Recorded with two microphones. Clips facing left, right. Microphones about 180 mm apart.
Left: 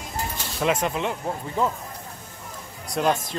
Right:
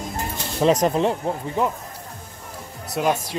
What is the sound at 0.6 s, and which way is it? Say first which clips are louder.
Speech: right 6 dB; 35° right (ahead or behind).